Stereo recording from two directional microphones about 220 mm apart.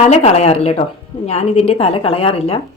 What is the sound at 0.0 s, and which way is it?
A woman's voice, 30° left (ahead or behind).